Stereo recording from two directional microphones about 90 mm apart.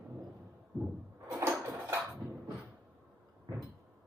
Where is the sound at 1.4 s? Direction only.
35° right (ahead or behind).